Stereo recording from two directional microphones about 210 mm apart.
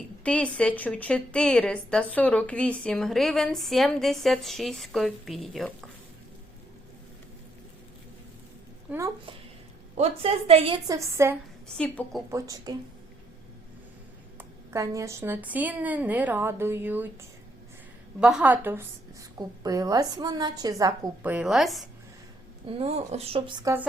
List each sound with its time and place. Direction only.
0.2 s a woman's voice: 5° left (ahead or behind)
8.9 s a woman's voice: 15° right (ahead or behind)
10.0 s speech: 30° right (ahead or behind)
10.8 s a woman's voice: 15° right (ahead or behind)
11.8 s a woman's voice: 5° left (ahead or behind)
12.3 s a woman's voice: 15° right (ahead or behind)
14.3 s a woman's voice: 15° right (ahead or behind)
18.2 s a woman's voice: 5° right (ahead or behind)
22.8 s speech: 30° right (ahead or behind)